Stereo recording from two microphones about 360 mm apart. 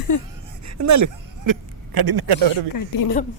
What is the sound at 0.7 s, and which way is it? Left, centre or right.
Speech, right.